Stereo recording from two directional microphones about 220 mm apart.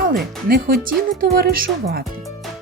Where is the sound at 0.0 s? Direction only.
45° right (ahead or behind).